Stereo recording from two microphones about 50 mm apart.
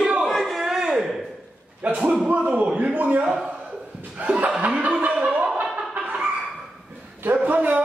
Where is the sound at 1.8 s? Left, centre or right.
Right.